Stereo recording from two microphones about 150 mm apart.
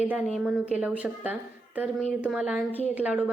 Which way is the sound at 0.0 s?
10° right (ahead or behind).